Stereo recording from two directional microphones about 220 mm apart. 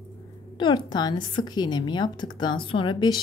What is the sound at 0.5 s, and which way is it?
A woman's voice, 20° left (ahead or behind).